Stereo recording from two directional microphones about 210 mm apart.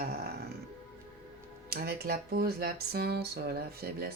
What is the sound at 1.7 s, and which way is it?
Speech, 50° right (ahead or behind).